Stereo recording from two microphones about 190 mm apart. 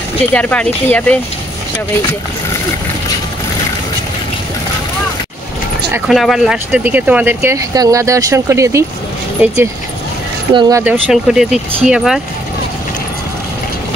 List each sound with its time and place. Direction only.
0.3 s speech: 5° left (ahead or behind)
6.0 s speech: centre (ahead or behind)
10.5 s speech: 25° right (ahead or behind)
10.8 s speech: 5° right (ahead or behind)